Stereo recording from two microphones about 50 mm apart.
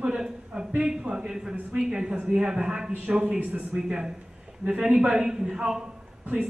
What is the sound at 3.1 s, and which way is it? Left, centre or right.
Speech, right.